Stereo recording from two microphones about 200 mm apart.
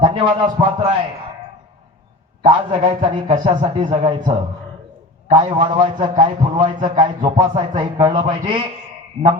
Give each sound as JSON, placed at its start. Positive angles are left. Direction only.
{"t": 0.0, "sound": "a man's voice", "side_deg": -25}
{"t": 2.4, "sound": "a man's voice", "side_deg": -25}